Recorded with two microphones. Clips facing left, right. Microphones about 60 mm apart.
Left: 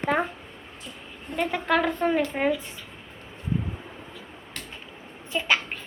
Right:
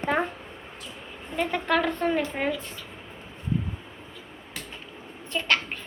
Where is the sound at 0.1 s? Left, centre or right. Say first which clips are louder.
Even; centre.